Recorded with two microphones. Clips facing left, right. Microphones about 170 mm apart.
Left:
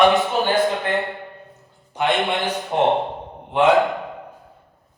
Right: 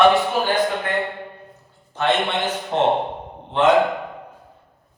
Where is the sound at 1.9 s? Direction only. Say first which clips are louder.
Even; 15° left (ahead or behind).